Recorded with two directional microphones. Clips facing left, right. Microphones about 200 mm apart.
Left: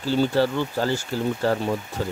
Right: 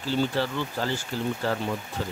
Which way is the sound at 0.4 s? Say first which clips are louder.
Left 6 dB; 40° left (ahead or behind).